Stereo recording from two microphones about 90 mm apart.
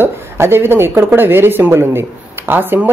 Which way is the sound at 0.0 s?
25° right (ahead or behind).